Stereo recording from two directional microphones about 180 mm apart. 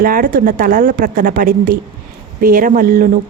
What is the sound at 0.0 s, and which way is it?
A woman's voice, 50° right (ahead or behind).